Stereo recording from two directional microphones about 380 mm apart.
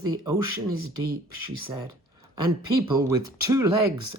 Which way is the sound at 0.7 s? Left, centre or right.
Right.